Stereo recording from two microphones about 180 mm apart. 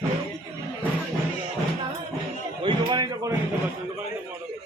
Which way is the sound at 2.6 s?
25° right (ahead or behind).